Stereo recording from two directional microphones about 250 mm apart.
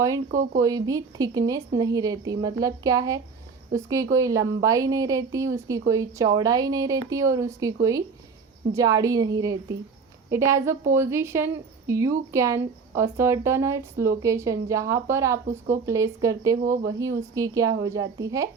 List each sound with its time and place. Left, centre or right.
0.3 s speech: right
0.6 s speech: centre